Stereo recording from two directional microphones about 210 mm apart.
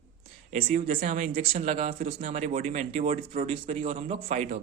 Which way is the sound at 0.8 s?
35° right (ahead or behind).